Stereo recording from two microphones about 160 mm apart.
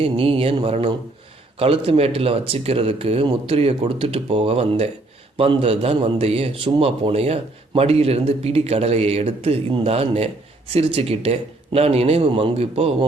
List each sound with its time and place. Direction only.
0.0 s a man's voice: 35° right (ahead or behind)